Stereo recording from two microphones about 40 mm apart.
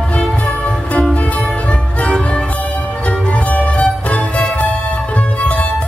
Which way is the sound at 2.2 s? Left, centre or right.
Left.